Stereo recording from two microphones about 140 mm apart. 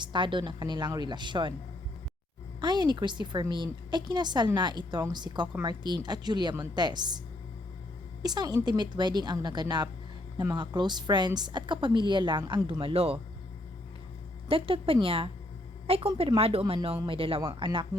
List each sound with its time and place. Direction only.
0.0 s a woman's voice: 35° right (ahead or behind)
2.6 s a woman's voice: 30° right (ahead or behind)
8.2 s a woman's voice: 30° right (ahead or behind)
14.4 s a woman's voice: 40° right (ahead or behind)